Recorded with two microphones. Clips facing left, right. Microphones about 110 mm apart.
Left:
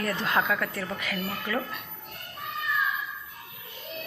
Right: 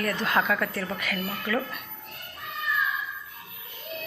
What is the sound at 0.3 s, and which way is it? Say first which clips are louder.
Speech: right 2 dB; 10° left (ahead or behind).